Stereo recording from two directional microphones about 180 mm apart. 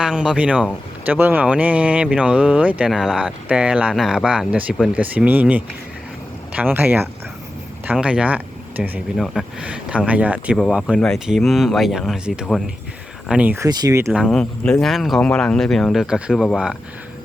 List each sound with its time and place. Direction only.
0.0 s speech: 5° right (ahead or behind)
14.1 s speech: centre (ahead or behind)